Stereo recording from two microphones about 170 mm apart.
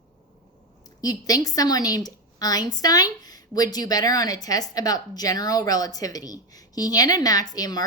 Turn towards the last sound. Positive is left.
turn(degrees=25)  # may be behind; listen again after turning